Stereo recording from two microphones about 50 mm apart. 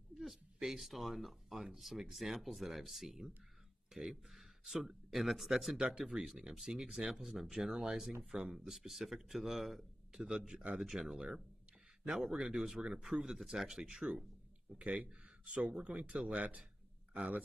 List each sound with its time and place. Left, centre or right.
0.1 s speech: centre
5.8 s speech: centre
6.2 s speech: centre
8.5 s speech: centre
10.8 s speech: centre
14.8 s speech: right